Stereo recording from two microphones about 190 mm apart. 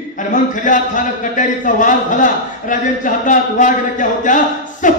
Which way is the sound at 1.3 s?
45° left (ahead or behind).